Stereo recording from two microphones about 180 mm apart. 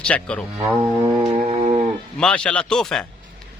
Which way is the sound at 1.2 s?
30° right (ahead or behind).